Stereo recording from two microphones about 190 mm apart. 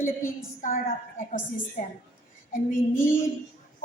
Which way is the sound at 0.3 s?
45° left (ahead or behind).